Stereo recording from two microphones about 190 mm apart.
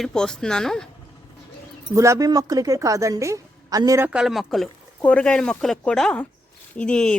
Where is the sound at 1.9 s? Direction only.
15° right (ahead or behind).